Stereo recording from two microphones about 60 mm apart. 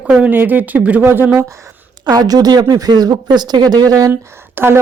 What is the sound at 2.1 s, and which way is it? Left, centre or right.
A woman's voice, right.